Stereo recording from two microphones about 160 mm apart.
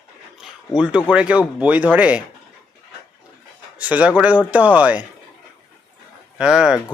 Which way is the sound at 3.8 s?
10° right (ahead or behind).